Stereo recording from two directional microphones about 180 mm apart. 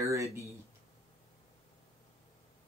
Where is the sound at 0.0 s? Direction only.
15° right (ahead or behind).